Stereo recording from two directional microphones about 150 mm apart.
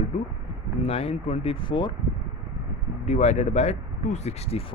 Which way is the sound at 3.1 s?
50° left (ahead or behind).